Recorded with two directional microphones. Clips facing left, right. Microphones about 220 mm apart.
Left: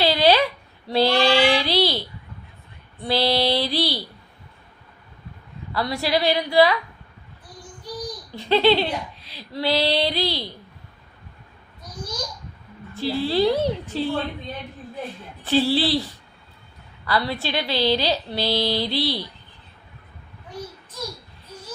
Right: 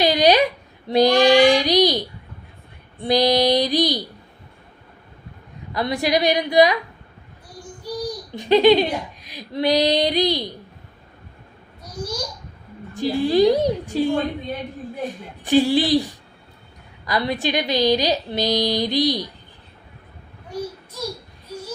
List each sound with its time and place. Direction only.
0.0 s child singing: 15° right (ahead or behind)
3.0 s speech: 15° right (ahead or behind)
5.7 s speech: 20° right (ahead or behind)
8.3 s speech: 15° right (ahead or behind)
12.9 s speech: 15° right (ahead or behind)
17.1 s speech: 15° right (ahead or behind)